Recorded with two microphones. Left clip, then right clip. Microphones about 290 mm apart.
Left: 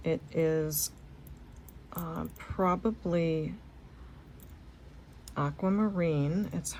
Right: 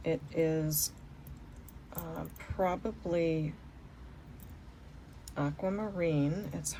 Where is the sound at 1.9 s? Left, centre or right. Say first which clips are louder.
Left 3 dB; left.